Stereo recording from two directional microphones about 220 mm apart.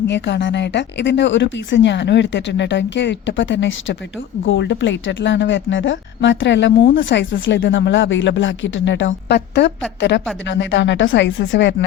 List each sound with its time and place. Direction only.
0.1 s speech: 55° left (ahead or behind)